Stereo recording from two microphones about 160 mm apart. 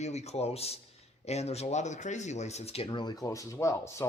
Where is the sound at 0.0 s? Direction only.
45° left (ahead or behind).